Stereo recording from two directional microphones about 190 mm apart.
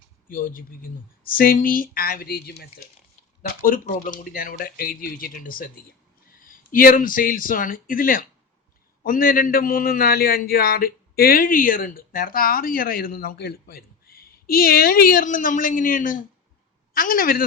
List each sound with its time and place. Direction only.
0.3 s a man's voice: 50° left (ahead or behind)
3.6 s a man's voice: 45° left (ahead or behind)